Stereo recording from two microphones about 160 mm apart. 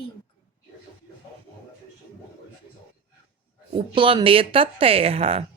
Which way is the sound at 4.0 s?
30° right (ahead or behind).